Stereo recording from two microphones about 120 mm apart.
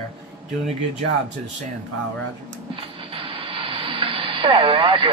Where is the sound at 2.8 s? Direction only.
50° right (ahead or behind).